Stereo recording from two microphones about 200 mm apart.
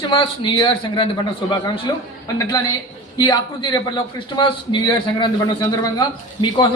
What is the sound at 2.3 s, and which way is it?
A woman's voice, 15° left (ahead or behind).